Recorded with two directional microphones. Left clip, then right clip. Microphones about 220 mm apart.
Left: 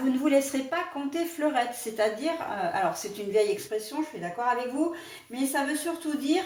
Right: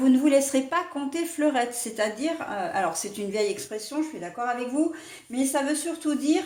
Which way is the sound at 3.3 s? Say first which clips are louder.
Left 3 dB; 45° right (ahead or behind).